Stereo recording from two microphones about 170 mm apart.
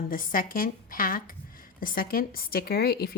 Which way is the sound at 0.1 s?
55° left (ahead or behind).